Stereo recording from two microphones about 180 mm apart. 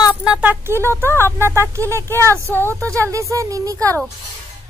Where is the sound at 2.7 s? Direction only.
15° right (ahead or behind).